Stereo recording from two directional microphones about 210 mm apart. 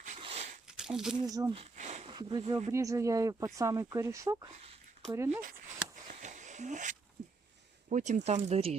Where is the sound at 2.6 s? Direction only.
15° right (ahead or behind).